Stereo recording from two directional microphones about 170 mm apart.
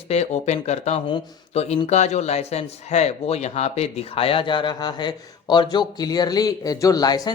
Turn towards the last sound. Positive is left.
turn(degrees=25)  # may be behind; listen again after turning